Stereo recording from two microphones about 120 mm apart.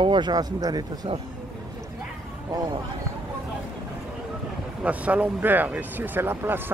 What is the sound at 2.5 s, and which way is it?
Speech, 35° right (ahead or behind).